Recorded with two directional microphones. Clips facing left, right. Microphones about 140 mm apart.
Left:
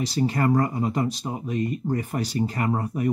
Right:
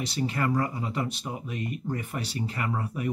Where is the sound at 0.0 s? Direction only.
35° left (ahead or behind).